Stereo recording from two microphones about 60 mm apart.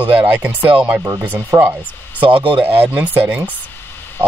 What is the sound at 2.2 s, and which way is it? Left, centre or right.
Speech, right.